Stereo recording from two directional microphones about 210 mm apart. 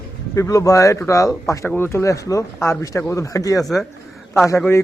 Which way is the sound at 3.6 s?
Centre (ahead or behind).